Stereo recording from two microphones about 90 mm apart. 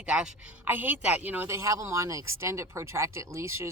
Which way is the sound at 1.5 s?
35° right (ahead or behind).